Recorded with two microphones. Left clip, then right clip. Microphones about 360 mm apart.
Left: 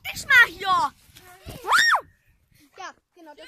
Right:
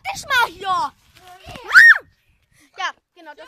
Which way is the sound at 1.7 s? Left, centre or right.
Centre.